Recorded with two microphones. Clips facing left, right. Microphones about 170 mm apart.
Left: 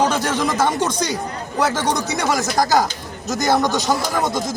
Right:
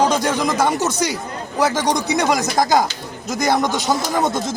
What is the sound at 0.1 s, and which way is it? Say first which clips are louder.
A man's voice: right 1 dB; 15° right (ahead or behind).